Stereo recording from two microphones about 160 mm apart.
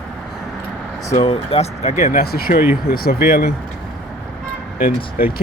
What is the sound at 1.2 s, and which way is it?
Speech, 35° left (ahead or behind).